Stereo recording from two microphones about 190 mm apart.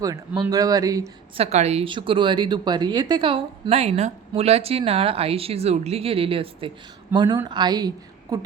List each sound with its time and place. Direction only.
0.0 s a woman's voice: 20° right (ahead or behind)
1.4 s a woman's voice: 35° right (ahead or behind); by 8.4 s 20° right (ahead or behind)